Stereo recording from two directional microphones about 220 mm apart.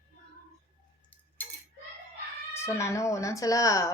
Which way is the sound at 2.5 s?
10° left (ahead or behind).